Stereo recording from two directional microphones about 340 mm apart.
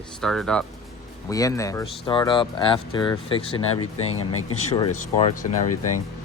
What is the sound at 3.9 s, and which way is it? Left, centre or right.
Speech, left.